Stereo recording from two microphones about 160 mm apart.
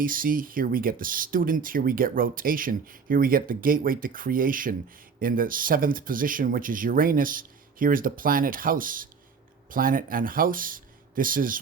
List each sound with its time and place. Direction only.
0.0 s speech: 60° right (ahead or behind)